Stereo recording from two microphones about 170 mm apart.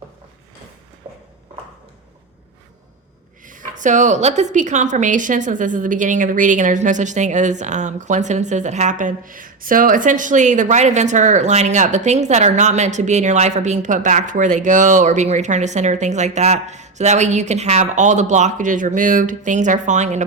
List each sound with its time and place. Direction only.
3.4 s a woman's voice: 50° right (ahead or behind)